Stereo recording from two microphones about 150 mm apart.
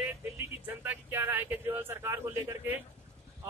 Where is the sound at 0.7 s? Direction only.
10° right (ahead or behind).